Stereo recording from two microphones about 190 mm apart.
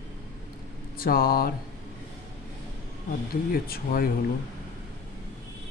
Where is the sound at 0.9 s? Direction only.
50° left (ahead or behind).